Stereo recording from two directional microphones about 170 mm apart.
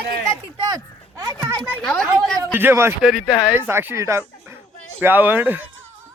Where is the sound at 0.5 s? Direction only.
20° right (ahead or behind).